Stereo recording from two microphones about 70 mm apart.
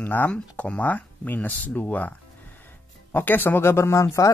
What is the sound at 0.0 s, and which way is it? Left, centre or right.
Speech, left.